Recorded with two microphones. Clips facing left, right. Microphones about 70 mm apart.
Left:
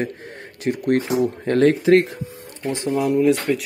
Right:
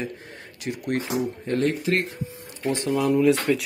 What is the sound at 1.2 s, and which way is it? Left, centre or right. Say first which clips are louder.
Speech: left 8 dB; left.